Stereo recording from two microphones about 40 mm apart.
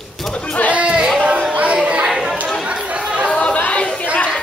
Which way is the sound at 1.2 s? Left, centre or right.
Right.